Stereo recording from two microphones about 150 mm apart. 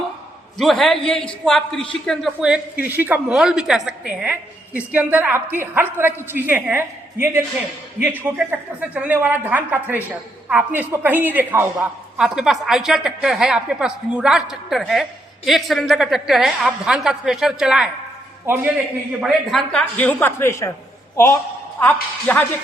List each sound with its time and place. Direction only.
0.5 s a man's voice: centre (ahead or behind)
19.2 s a woman's voice: centre (ahead or behind)